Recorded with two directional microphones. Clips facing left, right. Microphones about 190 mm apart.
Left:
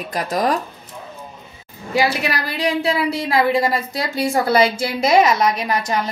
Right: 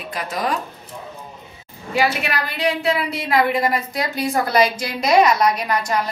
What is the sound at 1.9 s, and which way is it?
A woman's voice, 35° left (ahead or behind).